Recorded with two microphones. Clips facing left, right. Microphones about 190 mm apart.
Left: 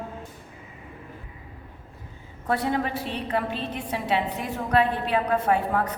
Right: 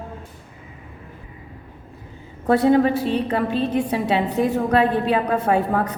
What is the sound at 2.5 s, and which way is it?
A woman's voice, 35° right (ahead or behind).